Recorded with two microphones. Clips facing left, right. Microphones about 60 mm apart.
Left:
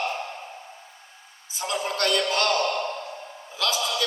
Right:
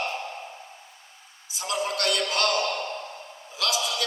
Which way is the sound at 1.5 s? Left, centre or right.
Left.